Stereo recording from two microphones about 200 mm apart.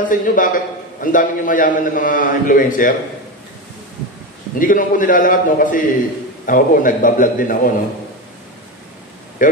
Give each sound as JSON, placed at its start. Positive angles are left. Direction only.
{"t": 0.0, "sound": "a man's voice", "side_deg": 40}
{"t": 4.6, "sound": "a man's voice", "side_deg": 40}
{"t": 9.4, "sound": "speech", "side_deg": 40}